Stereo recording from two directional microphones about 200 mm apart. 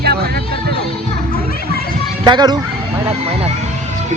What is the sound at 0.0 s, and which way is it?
Music, 50° right (ahead or behind).